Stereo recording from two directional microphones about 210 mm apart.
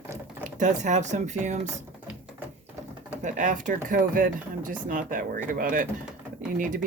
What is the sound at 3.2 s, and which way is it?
Speech, 35° right (ahead or behind).